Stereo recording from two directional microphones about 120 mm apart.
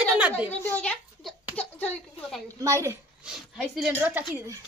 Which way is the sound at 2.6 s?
25° right (ahead or behind).